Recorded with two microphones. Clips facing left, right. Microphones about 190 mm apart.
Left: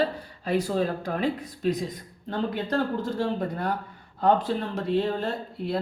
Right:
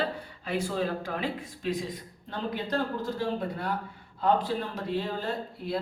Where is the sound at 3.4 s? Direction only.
45° left (ahead or behind).